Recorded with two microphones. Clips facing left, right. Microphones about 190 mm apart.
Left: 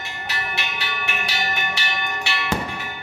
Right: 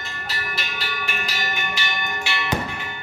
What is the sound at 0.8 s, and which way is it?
Music, 70° left (ahead or behind).